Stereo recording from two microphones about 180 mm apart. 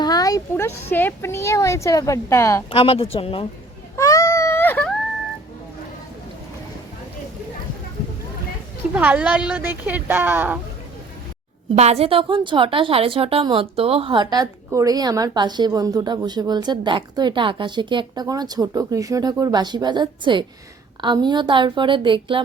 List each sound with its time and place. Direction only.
0.0 s speech: 20° left (ahead or behind)
2.6 s speech: 30° left (ahead or behind)
3.9 s baby cry: 20° left (ahead or behind)
9.0 s a woman's voice: 5° right (ahead or behind)
11.8 s a woman's voice: 35° right (ahead or behind)